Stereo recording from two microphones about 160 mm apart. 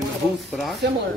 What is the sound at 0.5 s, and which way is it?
Speech, centre (ahead or behind).